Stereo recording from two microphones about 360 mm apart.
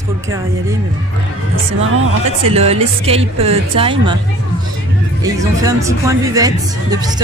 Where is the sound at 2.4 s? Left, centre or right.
Centre.